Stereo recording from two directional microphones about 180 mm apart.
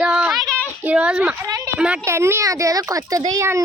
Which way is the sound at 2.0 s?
15° right (ahead or behind).